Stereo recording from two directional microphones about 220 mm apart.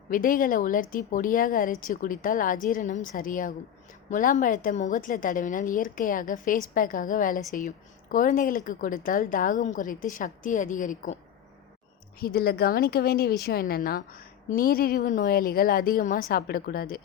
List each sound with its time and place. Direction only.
0.1 s speech: 40° left (ahead or behind)
12.2 s speech: 45° left (ahead or behind)